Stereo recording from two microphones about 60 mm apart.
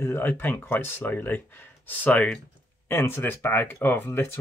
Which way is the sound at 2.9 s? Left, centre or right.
Left.